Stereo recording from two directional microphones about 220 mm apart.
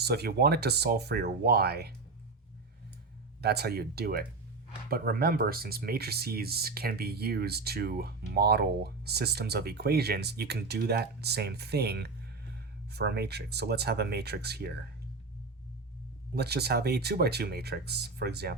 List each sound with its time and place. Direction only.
0.0 s speech: 45° right (ahead or behind)
3.4 s speech: 45° right (ahead or behind)
16.3 s speech: 45° right (ahead or behind)